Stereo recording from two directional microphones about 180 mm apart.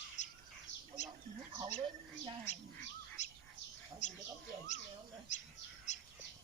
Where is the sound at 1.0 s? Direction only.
40° left (ahead or behind).